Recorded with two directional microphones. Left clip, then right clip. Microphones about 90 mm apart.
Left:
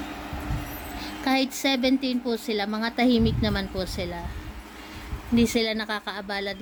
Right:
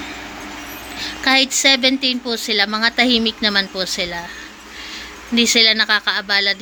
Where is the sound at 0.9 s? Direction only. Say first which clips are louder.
Right 10 dB; 25° left (ahead or behind).